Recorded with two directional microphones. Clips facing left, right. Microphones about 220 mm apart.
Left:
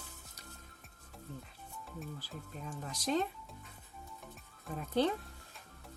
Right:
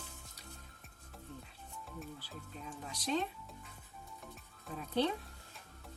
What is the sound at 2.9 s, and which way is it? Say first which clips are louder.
Speech: left 2 dB; 45° left (ahead or behind).